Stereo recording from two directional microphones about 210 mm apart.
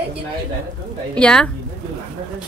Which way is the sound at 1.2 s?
5° left (ahead or behind).